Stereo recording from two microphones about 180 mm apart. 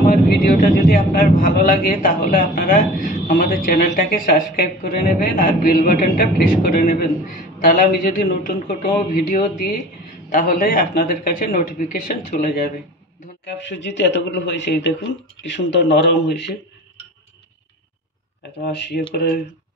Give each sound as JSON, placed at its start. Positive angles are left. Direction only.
{"t": 0.0, "sound": "speech", "side_deg": 55}
{"t": 13.7, "sound": "speech", "side_deg": 75}
{"t": 18.7, "sound": "speech", "side_deg": 70}